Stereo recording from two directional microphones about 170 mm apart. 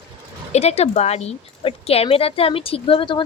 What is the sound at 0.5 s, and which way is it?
Speech, 40° left (ahead or behind).